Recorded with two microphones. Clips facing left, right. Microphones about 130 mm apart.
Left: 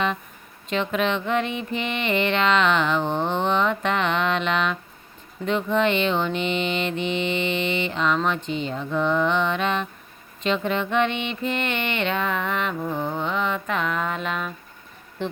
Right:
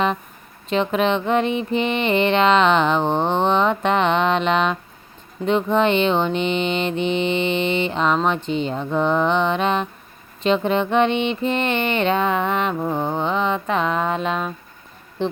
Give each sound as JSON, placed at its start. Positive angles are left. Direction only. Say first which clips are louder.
{"t": 0.7, "sound": "mantra", "louder": "right 4 dB", "side_deg": -35}